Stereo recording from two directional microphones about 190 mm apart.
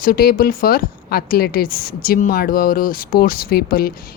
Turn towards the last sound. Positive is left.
turn(degrees=50)  # may be behind; listen again after turning